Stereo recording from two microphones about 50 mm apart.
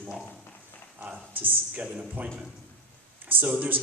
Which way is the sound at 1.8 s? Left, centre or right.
Right.